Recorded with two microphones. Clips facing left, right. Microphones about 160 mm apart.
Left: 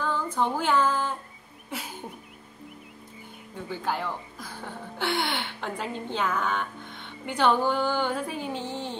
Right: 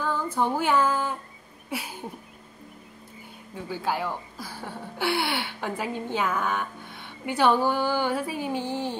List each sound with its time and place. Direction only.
0.0 s female singing: 10° right (ahead or behind)
3.7 s speech: 10° right (ahead or behind)